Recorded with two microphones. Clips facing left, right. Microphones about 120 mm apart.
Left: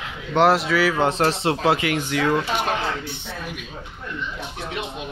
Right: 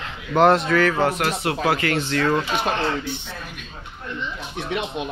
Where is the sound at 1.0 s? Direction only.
30° left (ahead or behind).